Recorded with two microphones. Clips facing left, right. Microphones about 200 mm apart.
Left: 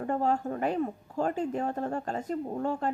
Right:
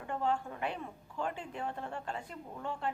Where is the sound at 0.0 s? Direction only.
40° left (ahead or behind).